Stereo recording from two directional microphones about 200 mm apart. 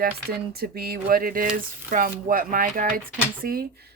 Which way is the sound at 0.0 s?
50° right (ahead or behind).